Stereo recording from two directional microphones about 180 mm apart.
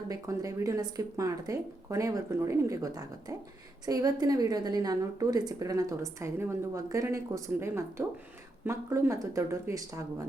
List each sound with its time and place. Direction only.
0.1 s speech: 20° right (ahead or behind)